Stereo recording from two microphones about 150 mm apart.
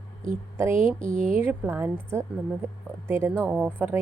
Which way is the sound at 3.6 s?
10° right (ahead or behind).